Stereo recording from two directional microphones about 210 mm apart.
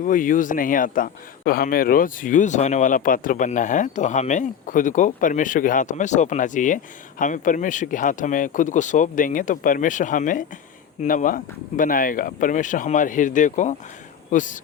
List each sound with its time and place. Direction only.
0.0 s a man's voice: 40° left (ahead or behind)